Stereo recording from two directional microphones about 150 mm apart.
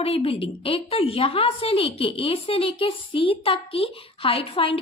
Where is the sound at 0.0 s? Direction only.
40° left (ahead or behind).